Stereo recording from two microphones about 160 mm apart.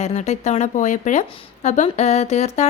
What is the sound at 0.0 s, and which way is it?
Speech, 45° left (ahead or behind).